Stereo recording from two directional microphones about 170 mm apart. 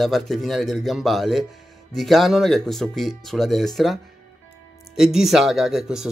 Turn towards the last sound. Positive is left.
turn(degrees=0)  # may be behind; listen again after turning